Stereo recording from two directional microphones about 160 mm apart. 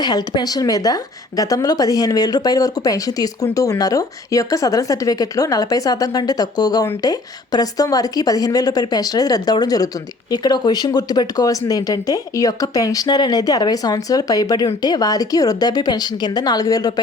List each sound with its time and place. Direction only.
0.0 s speech: 25° left (ahead or behind)